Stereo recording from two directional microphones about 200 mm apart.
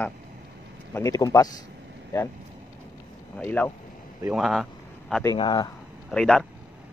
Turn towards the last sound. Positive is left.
turn(degrees=5)  # may be behind; listen again after turning